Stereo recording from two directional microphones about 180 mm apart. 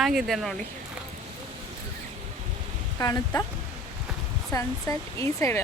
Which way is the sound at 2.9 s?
20° left (ahead or behind).